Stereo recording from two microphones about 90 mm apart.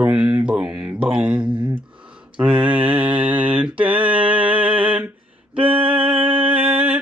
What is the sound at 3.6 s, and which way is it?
Speech, 15° right (ahead or behind).